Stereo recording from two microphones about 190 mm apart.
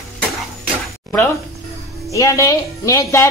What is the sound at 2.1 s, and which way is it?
Speech, 15° left (ahead or behind).